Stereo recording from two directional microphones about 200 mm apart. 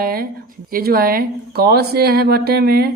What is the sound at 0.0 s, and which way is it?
Speech, 50° right (ahead or behind).